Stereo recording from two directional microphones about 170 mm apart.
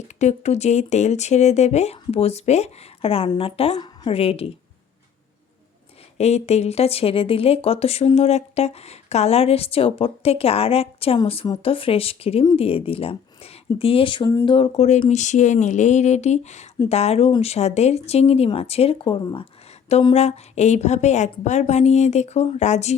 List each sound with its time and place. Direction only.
0.1 s speech: 45° left (ahead or behind)
6.1 s speech: 40° left (ahead or behind)